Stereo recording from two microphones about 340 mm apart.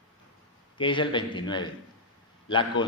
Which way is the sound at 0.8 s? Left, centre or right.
Centre.